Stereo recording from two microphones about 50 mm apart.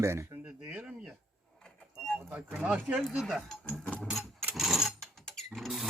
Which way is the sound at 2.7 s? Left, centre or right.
Right.